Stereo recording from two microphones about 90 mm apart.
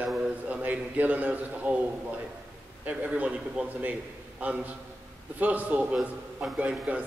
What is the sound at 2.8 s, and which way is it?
A man's voice, 15° right (ahead or behind).